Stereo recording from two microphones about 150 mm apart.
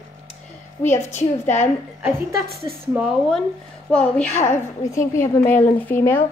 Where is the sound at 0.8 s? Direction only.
15° left (ahead or behind).